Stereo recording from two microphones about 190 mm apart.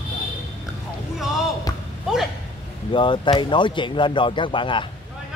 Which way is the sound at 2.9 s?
25° left (ahead or behind).